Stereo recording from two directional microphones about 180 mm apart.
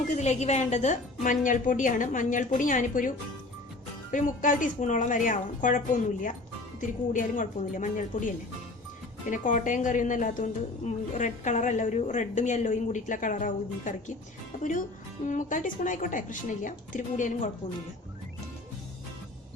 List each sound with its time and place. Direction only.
0.0 s a woman's voice: 40° left (ahead or behind)
4.1 s a woman's voice: 45° left (ahead or behind)
9.3 s a woman's voice: 45° left (ahead or behind)
15.3 s a woman's voice: 45° left (ahead or behind)